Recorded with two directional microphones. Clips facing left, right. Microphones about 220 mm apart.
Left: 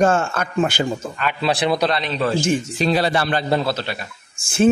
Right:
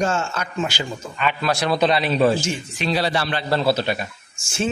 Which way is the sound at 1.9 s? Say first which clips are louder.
Right 4 dB; 10° right (ahead or behind).